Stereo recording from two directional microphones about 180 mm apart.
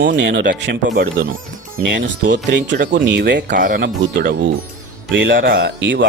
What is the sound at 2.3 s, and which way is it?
Speech, 50° right (ahead or behind).